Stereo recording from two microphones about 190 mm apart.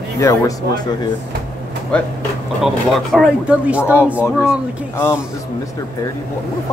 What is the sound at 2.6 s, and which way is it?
Speech, centre (ahead or behind).